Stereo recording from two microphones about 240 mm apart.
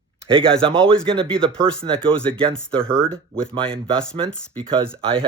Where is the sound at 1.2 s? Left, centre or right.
Centre.